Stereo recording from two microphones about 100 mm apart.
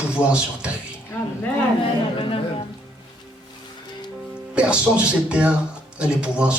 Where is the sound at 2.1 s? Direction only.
65° left (ahead or behind).